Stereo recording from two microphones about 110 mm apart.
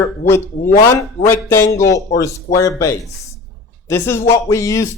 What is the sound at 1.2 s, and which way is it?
Speech, 25° left (ahead or behind).